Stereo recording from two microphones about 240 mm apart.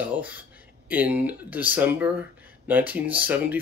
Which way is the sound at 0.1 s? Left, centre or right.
Centre.